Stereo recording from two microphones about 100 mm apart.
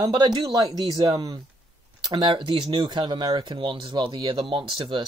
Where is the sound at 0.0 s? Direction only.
45° right (ahead or behind).